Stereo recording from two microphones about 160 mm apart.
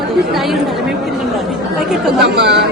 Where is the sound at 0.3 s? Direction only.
Centre (ahead or behind).